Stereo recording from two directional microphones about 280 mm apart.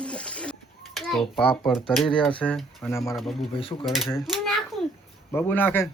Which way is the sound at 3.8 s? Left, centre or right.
Centre.